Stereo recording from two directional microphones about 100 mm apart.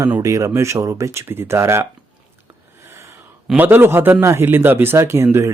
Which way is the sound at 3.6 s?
20° right (ahead or behind).